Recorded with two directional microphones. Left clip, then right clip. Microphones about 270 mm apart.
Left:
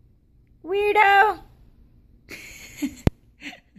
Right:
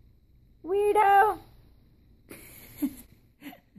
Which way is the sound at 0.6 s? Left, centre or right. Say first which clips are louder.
Left 4 dB; centre.